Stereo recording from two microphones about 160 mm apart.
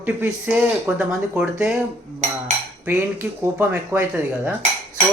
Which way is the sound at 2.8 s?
15° right (ahead or behind).